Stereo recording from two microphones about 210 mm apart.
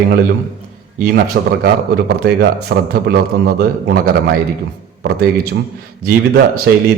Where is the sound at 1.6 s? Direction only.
45° right (ahead or behind).